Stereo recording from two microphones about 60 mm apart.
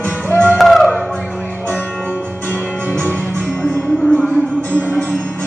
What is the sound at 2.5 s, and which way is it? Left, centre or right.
Music, right.